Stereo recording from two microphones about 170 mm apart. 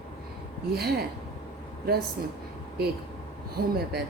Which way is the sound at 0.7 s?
70° right (ahead or behind).